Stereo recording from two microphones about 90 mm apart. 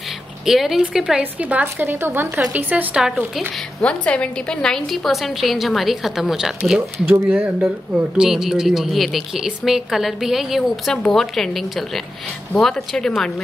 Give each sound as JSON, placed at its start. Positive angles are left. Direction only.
{"t": 0.5, "sound": "a woman's voice", "side_deg": -5}
{"t": 1.2, "sound": "a woman's voice", "side_deg": -15}
{"t": 3.8, "sound": "a woman's voice", "side_deg": 15}
{"t": 7.1, "sound": "speech", "side_deg": -20}
{"t": 7.3, "sound": "a woman's voice", "side_deg": -5}